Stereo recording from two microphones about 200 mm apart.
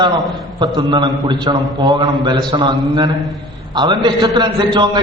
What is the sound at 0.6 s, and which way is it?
A man's voice, 20° right (ahead or behind).